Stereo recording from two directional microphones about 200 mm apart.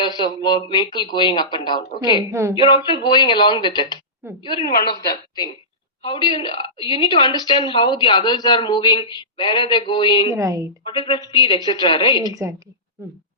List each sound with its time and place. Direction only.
0.2 s a woman's voice: 20° left (ahead or behind)
2.3 s a woman's voice: 15° right (ahead or behind)
2.6 s a woman's voice: 25° left (ahead or behind)
4.2 s a woman's voice: 10° right (ahead or behind)
4.9 s a woman's voice: 20° left (ahead or behind)
10.3 s a woman's voice: 15° right (ahead or behind)
10.8 s a woman's voice: 25° left (ahead or behind)
12.3 s a woman's voice: 15° right (ahead or behind)